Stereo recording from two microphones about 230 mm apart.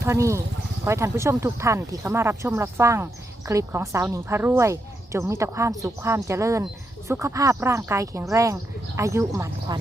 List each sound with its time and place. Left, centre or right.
0.0 s speech: centre